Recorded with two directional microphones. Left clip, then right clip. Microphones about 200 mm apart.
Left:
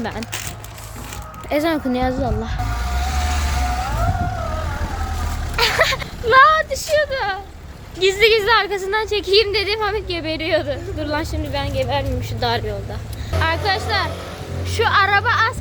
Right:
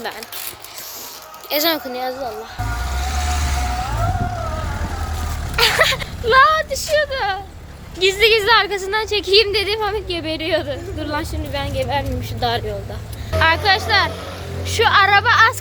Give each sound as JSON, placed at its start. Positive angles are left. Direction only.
{"t": 0.0, "sound": "a woman's voice", "side_deg": 0}
{"t": 1.5, "sound": "a woman's voice", "side_deg": 5}
{"t": 1.9, "sound": "a child's voice", "side_deg": 20}
{"t": 5.5, "sound": "a sound", "side_deg": 0}
{"t": 7.9, "sound": "a woman's voice", "side_deg": 5}